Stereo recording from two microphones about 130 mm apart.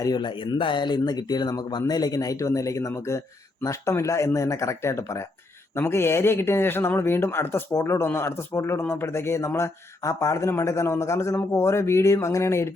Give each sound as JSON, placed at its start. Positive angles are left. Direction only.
{"t": 0.0, "sound": "speech", "side_deg": 35}